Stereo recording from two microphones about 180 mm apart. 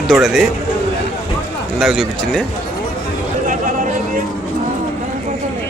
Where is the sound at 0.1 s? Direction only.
Centre (ahead or behind).